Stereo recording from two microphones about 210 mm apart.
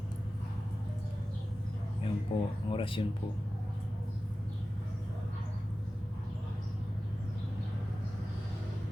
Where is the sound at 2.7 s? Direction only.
25° left (ahead or behind).